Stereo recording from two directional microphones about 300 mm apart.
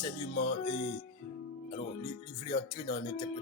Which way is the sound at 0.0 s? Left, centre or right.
Centre.